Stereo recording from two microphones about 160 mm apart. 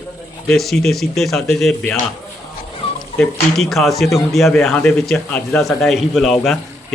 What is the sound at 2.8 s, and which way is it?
Dog, 35° left (ahead or behind).